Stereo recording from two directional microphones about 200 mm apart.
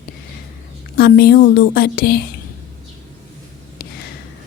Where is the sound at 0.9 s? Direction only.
50° left (ahead or behind).